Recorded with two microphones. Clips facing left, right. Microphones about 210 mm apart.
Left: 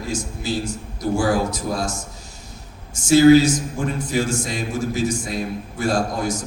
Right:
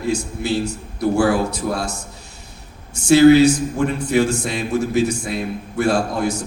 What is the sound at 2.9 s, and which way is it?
A man's voice, 65° right (ahead or behind).